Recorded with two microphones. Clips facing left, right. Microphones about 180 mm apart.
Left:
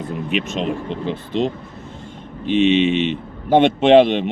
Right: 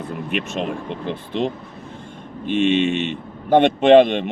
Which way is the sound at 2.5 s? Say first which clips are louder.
Left 3 dB; 50° right (ahead or behind).